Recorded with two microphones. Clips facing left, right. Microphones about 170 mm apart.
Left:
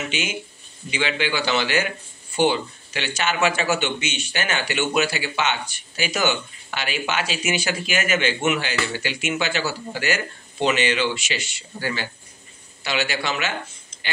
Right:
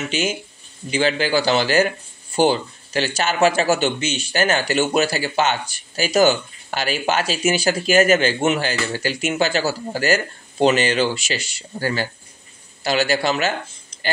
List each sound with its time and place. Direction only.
0.1 s a man's voice: 40° right (ahead or behind)